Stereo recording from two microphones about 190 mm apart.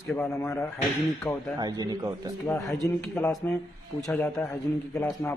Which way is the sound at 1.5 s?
20° right (ahead or behind).